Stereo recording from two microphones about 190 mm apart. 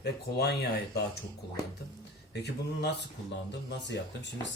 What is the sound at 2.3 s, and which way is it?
Speech, 60° left (ahead or behind).